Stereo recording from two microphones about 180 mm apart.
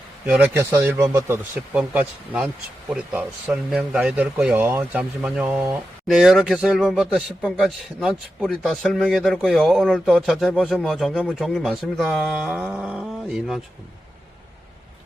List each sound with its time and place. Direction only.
0.3 s speech: 5° right (ahead or behind)